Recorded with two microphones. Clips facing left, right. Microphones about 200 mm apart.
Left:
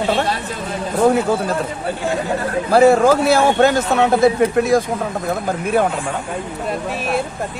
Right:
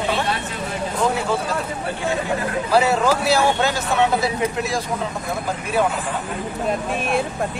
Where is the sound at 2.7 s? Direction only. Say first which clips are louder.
Left 7 dB; 50° left (ahead or behind).